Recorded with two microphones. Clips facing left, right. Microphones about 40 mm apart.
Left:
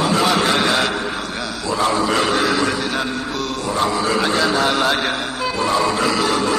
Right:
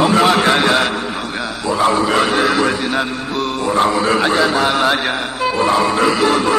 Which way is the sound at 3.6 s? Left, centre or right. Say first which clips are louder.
Right 5 dB; right.